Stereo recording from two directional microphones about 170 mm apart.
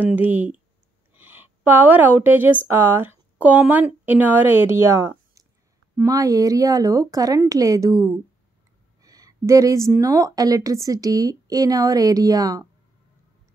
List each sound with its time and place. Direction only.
0.0 s a woman's voice: 10° right (ahead or behind)